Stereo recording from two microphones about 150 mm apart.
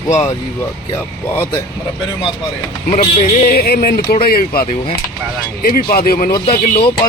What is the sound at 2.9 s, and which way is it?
Speech, 65° left (ahead or behind).